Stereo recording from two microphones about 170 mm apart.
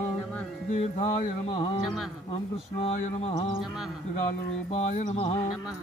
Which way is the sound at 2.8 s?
40° left (ahead or behind).